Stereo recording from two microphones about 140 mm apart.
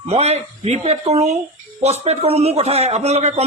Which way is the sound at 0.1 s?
50° right (ahead or behind).